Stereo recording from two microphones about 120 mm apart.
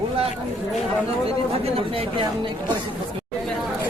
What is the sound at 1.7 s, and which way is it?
Speech, 50° right (ahead or behind).